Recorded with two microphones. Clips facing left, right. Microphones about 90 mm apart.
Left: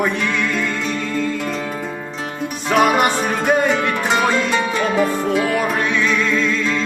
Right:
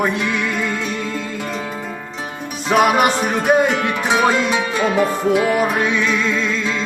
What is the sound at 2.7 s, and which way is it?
Music, 10° right (ahead or behind).